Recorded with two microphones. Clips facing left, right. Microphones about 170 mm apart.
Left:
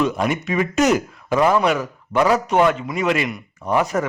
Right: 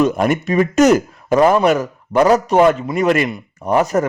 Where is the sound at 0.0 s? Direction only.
45° right (ahead or behind).